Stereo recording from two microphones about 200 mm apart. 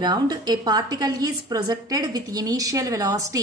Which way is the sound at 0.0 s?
20° right (ahead or behind).